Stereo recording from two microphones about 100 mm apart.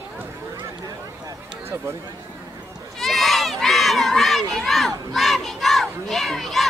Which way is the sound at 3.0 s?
Centre (ahead or behind).